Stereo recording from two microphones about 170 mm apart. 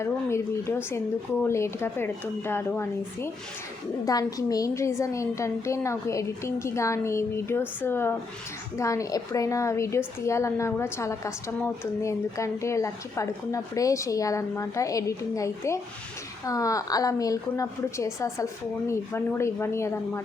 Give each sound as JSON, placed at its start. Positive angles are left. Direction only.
{"t": 0.0, "sound": "a woman's voice", "side_deg": 15}